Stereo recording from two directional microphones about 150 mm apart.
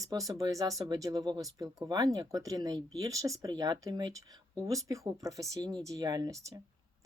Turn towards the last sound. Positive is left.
turn(degrees=-25)  # may be behind; listen again after turning